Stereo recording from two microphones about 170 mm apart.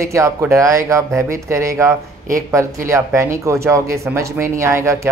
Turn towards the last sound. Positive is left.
turn(degrees=-15)  # may be behind; listen again after turning